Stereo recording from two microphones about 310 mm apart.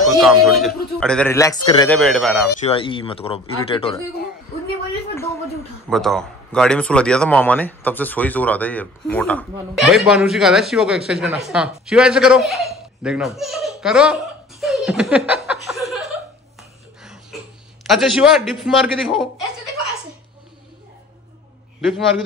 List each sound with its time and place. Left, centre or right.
0.0 s a man's voice: centre
2.0 s a man's voice: centre
2.6 s a man's voice: centre
5.1 s a sound: centre
5.9 s a man's voice: centre
14.6 s laughter: centre
17.0 s a sound: centre
17.8 s a man's voice: centre